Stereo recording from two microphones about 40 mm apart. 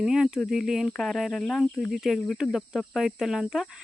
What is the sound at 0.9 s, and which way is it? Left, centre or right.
Speech, centre.